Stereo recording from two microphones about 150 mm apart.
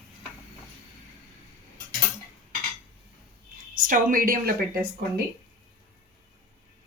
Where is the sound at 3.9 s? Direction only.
65° right (ahead or behind).